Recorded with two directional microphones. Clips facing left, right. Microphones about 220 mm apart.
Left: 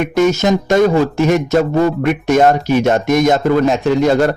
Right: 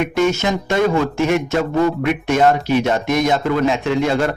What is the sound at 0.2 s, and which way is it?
A man's voice, 40° left (ahead or behind).